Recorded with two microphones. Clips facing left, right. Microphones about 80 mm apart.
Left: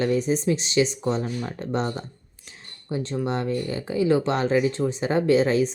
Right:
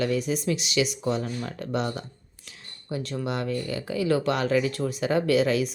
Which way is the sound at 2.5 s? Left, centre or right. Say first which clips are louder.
Left 3 dB; left.